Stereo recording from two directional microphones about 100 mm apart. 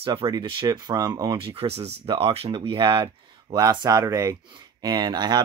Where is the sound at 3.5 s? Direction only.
40° right (ahead or behind).